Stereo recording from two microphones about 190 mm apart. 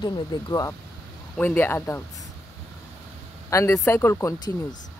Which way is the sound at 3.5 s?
15° left (ahead or behind).